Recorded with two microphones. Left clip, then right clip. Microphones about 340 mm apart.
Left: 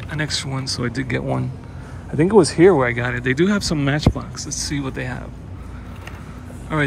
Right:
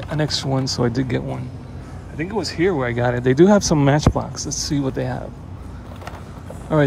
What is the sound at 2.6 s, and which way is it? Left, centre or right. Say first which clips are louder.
Speech: left 5 dB; centre.